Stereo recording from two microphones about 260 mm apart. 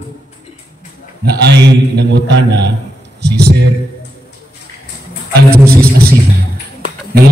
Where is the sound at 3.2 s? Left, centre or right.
Right.